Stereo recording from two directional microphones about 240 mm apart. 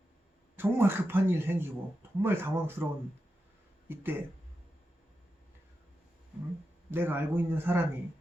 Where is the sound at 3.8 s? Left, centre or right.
Centre.